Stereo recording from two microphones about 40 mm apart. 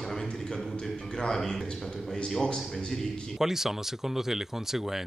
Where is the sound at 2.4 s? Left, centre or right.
Left.